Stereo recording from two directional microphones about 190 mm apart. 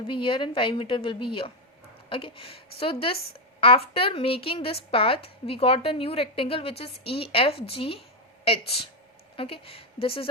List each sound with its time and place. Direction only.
0.1 s a woman's voice: 25° left (ahead or behind)
9.3 s a woman's voice: 30° left (ahead or behind)